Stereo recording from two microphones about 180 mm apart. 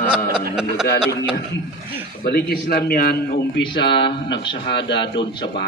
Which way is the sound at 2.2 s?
60° left (ahead or behind).